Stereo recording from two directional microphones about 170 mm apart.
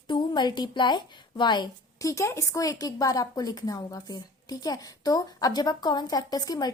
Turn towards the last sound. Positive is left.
turn(degrees=25)  # may be behind; listen again after turning